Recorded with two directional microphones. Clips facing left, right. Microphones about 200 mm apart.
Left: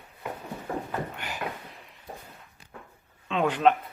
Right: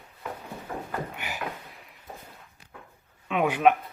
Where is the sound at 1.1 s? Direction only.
10° right (ahead or behind).